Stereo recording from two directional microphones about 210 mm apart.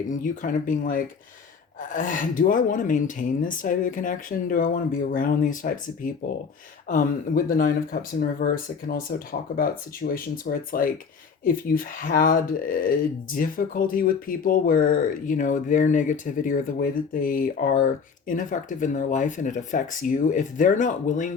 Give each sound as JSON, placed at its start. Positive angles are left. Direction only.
{"t": 0.1, "sound": "speech", "side_deg": 40}